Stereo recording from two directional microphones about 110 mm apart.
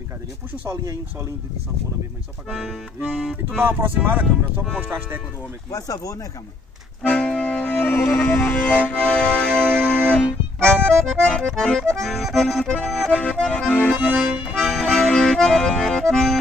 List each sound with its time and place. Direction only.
2.5 s accordion: 5° left (ahead or behind)
3.6 s speech: 20° right (ahead or behind)
5.7 s speech: 30° left (ahead or behind)
7.1 s music: 10° left (ahead or behind)
11.0 s accordion: 5° left (ahead or behind)
14.0 s speech: 15° right (ahead or behind)
14.5 s accordion: centre (ahead or behind)